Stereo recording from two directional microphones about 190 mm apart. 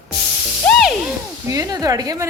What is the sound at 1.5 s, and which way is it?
Speech, 20° right (ahead or behind).